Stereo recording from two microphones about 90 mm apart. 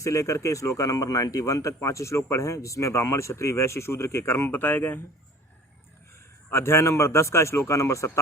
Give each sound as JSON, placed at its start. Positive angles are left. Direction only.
{"t": 0.0, "sound": "speech", "side_deg": 35}
{"t": 6.5, "sound": "speech", "side_deg": 30}